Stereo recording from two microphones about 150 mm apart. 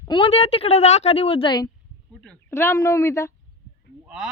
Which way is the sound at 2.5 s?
20° left (ahead or behind).